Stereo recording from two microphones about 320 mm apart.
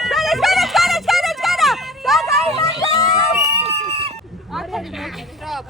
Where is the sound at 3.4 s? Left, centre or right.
Centre.